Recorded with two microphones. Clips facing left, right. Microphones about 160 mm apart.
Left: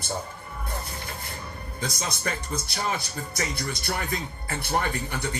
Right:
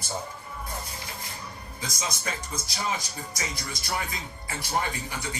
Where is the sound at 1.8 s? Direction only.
60° left (ahead or behind).